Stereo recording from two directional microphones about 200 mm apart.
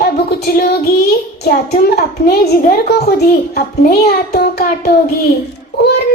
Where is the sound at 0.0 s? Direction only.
55° left (ahead or behind).